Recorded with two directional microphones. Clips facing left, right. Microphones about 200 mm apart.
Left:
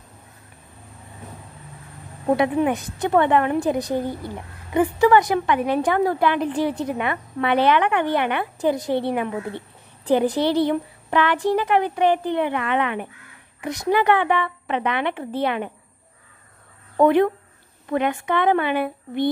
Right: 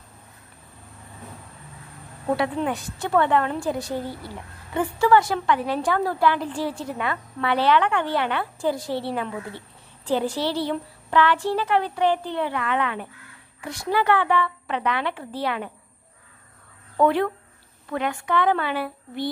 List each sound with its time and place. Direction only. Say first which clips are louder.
2.2 s a woman's voice: left 5 dB; 20° left (ahead or behind)
16.9 s a woman's voice: left 4 dB; 20° left (ahead or behind)